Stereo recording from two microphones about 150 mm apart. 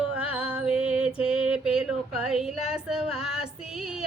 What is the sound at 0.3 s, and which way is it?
Music, 5° right (ahead or behind).